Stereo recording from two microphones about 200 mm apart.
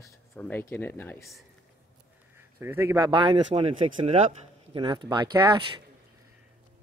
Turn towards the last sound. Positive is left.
turn(degrees=-20)  # may be behind; listen again after turning